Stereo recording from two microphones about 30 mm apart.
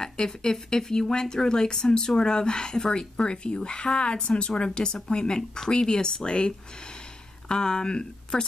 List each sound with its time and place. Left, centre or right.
0.0 s speech: left